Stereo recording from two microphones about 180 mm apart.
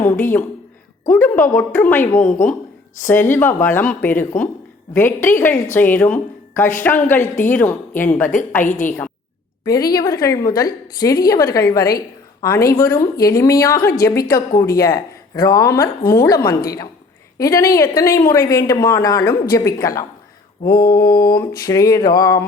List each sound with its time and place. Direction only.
0.0 s speech: 10° left (ahead or behind)
8.6 s a woman's voice: 45° left (ahead or behind)
9.6 s speech: 20° left (ahead or behind)